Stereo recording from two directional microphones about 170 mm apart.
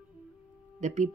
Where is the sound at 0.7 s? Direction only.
45° right (ahead or behind).